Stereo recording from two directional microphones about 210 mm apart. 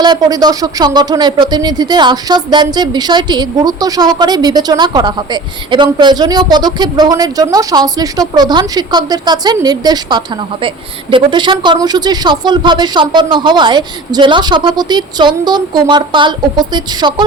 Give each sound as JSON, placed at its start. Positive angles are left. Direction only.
{"t": 0.0, "sound": "speech", "side_deg": -20}